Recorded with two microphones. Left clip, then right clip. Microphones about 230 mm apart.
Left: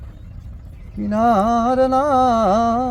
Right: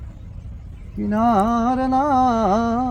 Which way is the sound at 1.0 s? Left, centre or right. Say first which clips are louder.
Left 2 dB; left.